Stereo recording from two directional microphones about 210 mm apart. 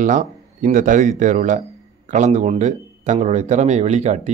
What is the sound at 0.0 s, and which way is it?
Speech, 35° right (ahead or behind).